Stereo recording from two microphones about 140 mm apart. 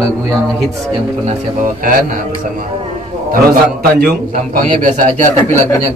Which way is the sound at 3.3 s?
90° right.